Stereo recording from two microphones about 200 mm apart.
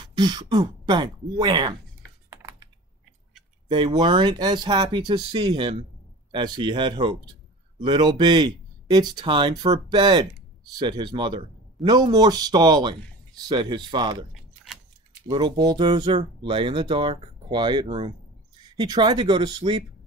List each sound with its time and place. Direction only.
0.0 s speech: 20° right (ahead or behind)
2.2 s computer keyboard: 20° right (ahead or behind)
3.6 s speech: 25° right (ahead or behind)
15.2 s speech: 20° right (ahead or behind)